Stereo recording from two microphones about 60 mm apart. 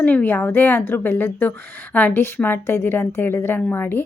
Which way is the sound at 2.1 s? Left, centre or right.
Left.